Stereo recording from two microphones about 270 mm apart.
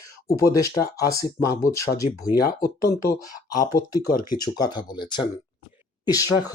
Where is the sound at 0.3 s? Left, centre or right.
Centre.